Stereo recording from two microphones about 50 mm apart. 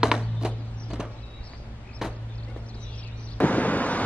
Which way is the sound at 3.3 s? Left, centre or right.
Left.